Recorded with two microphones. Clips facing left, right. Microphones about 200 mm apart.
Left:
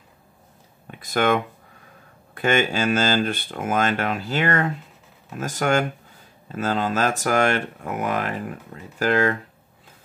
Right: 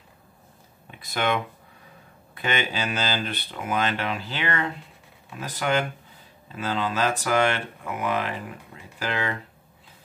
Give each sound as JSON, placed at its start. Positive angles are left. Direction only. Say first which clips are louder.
{"t": 0.9, "sound": "speech", "louder": "left 5 dB", "side_deg": 50}